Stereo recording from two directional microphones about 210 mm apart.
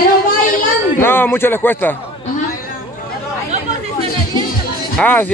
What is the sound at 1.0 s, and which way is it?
Speech, 10° left (ahead or behind).